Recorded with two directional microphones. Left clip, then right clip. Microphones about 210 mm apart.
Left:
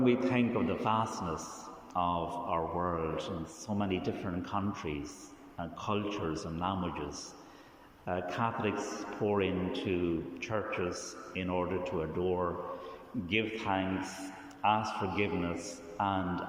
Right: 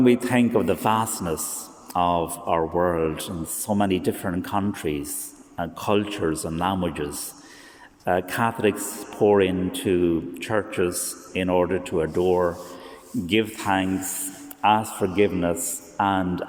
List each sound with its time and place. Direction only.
0.0 s a man's voice: 40° right (ahead or behind)